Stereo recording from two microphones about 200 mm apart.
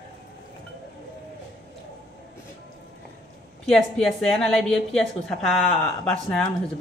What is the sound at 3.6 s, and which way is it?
A woman's voice, centre (ahead or behind).